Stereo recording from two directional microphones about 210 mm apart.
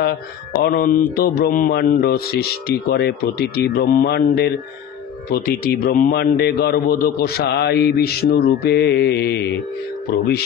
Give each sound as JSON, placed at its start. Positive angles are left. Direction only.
{"t": 0.0, "sound": "a man's voice", "side_deg": 50}